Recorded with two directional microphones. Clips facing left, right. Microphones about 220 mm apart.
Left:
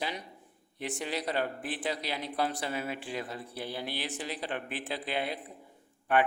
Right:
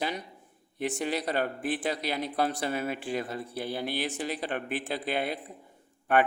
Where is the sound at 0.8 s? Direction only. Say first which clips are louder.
Right 5 dB; 50° right (ahead or behind).